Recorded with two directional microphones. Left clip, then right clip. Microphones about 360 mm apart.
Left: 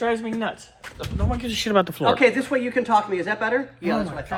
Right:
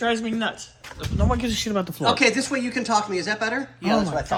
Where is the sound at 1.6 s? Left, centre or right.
Centre.